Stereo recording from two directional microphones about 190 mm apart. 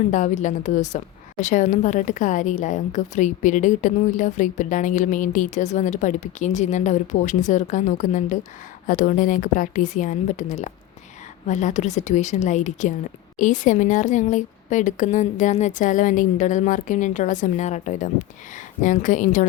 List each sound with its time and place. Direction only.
0.1 s a woman's voice: 40° left (ahead or behind)